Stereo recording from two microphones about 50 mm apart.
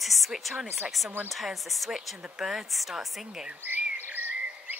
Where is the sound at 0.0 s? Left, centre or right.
Centre.